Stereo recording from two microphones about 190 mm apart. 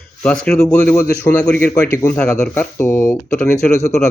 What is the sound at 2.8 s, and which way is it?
Speech, 15° left (ahead or behind).